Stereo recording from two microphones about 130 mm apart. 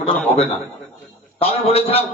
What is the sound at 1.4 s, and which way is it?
Speech, 50° left (ahead or behind).